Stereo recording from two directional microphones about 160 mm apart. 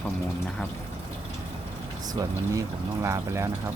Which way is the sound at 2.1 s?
20° right (ahead or behind).